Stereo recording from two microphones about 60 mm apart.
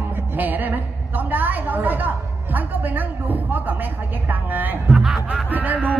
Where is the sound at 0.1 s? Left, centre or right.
Right.